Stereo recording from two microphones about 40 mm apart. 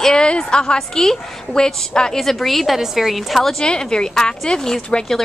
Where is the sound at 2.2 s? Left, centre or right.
Centre.